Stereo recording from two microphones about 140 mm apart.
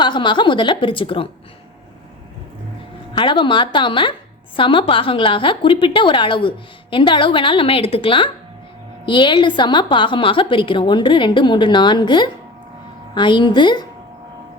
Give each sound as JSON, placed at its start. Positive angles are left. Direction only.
{"t": 0.0, "sound": "a woman's voice", "side_deg": 35}
{"t": 3.1, "sound": "a woman's voice", "side_deg": 35}